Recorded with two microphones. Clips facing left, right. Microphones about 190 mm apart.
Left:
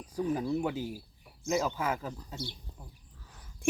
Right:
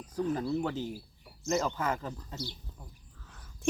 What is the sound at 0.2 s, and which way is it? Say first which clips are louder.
Speech: even; 10° left (ahead or behind).